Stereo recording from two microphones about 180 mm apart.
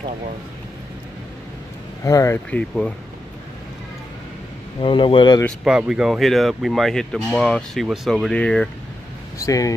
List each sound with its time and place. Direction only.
2.0 s speech: 15° left (ahead or behind)
4.8 s speech: 30° left (ahead or behind)
5.6 s speech: 5° right (ahead or behind)
9.4 s speech: 20° left (ahead or behind)